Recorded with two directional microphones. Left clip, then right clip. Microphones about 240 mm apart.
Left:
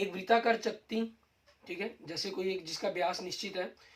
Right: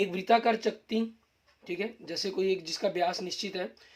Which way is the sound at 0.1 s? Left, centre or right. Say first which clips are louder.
Right 3 dB; right.